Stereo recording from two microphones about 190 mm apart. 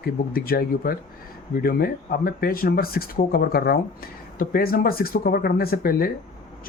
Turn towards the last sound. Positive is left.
turn(degrees=50)  # may be behind; listen again after turning